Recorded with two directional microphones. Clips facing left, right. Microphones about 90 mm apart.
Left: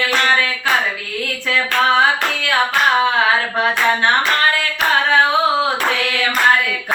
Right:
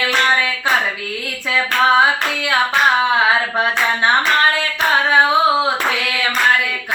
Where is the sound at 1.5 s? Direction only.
15° right (ahead or behind).